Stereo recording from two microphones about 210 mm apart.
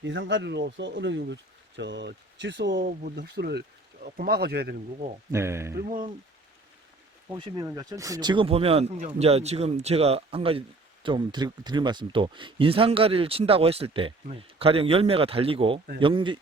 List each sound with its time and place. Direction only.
0.0 s speech: 60° right (ahead or behind)
2.8 s speech: 45° right (ahead or behind)
5.3 s speech: 10° right (ahead or behind)
7.3 s speech: 20° right (ahead or behind)